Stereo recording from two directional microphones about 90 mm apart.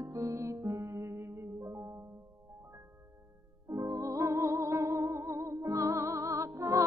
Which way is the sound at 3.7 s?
35° right (ahead or behind).